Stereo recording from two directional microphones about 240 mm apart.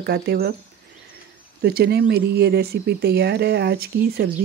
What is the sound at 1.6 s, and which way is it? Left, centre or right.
Speech, right.